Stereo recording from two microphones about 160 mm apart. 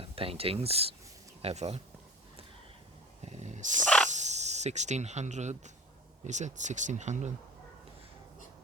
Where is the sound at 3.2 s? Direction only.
45° right (ahead or behind).